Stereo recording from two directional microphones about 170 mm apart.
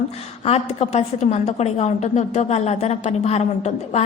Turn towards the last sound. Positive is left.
turn(degrees=40)  # may be behind; listen again after turning